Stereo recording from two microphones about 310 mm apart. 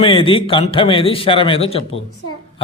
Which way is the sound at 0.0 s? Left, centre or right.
Centre.